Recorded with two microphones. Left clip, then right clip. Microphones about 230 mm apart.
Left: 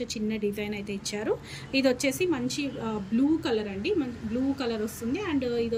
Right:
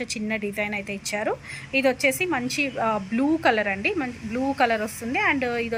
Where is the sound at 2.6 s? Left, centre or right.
Right.